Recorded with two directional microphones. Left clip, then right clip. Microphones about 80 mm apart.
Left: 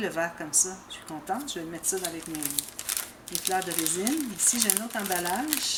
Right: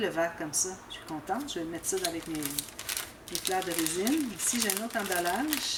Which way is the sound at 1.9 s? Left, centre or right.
Centre.